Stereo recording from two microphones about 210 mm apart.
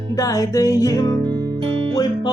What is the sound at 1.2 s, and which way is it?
Music, 25° right (ahead or behind).